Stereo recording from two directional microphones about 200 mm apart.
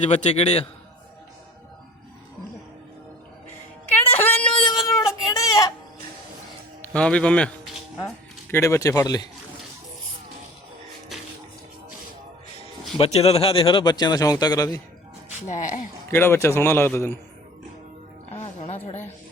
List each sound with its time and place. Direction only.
0.0 s a man's voice: 30° left (ahead or behind)
4.2 s a sound: 5° left (ahead or behind)
4.9 s a sound: 15° left (ahead or behind)
6.9 s a man's voice: 5° left (ahead or behind)
13.0 s speech: 30° left (ahead or behind)
15.4 s a man's voice: 40° left (ahead or behind)
16.0 s a man's voice: 10° left (ahead or behind)
18.3 s music: 30° left (ahead or behind)